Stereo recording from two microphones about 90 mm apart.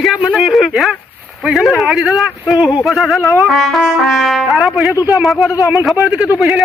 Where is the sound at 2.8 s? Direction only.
Centre (ahead or behind).